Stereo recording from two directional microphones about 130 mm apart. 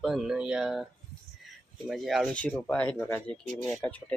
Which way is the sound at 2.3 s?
10° left (ahead or behind).